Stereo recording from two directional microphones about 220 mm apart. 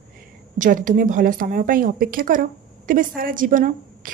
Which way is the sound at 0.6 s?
35° right (ahead or behind).